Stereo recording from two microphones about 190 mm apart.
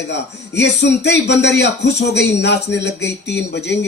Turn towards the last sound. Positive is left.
turn(degrees=65)  # may be behind; listen again after turning